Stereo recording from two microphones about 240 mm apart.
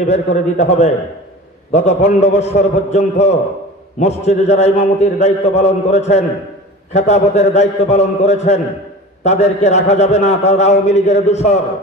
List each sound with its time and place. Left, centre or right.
0.1 s a man's voice: left